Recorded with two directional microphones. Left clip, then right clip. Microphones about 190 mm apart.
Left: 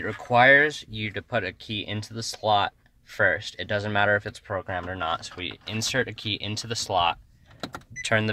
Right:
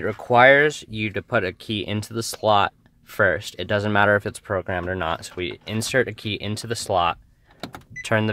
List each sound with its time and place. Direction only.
0.0 s speech: 50° right (ahead or behind)
8.0 s speech: 30° right (ahead or behind)